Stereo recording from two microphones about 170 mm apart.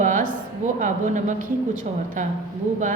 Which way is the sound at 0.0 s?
50° right (ahead or behind).